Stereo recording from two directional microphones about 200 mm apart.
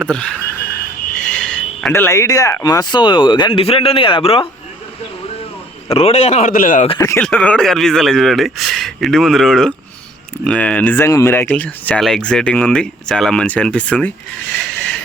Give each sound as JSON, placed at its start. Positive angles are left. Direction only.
{"t": 0.0, "sound": "speech", "side_deg": 5}
{"t": 5.9, "sound": "a man's voice", "side_deg": 30}
{"t": 7.2, "sound": "speech", "side_deg": 5}
{"t": 14.5, "sound": "a sound", "side_deg": 5}